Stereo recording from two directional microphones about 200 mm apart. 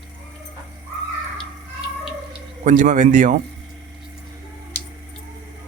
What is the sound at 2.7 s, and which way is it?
Speech, 40° right (ahead or behind).